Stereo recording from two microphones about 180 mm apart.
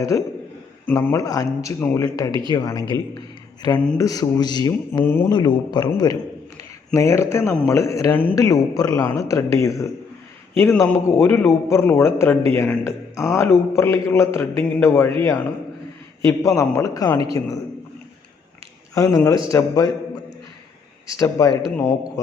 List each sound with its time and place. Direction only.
0.1 s a man's voice: 15° left (ahead or behind)
3.2 s a sound: 20° left (ahead or behind)
3.9 s speech: 20° left (ahead or behind)
5.3 s a man's voice: 25° left (ahead or behind)
16.2 s a man's voice: 15° left (ahead or behind)
18.9 s speech: 20° left (ahead or behind)
21.2 s a man's voice: 20° left (ahead or behind)